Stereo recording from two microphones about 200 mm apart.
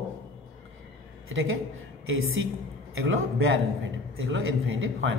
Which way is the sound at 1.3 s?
80° right.